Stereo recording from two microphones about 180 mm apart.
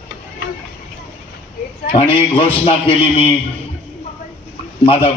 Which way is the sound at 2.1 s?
30° left (ahead or behind).